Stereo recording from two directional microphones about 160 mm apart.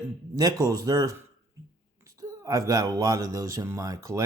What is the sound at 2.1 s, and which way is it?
Speech, 20° right (ahead or behind).